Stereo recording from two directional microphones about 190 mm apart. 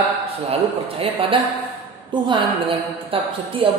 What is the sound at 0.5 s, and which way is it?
A woman's voice, 30° right (ahead or behind).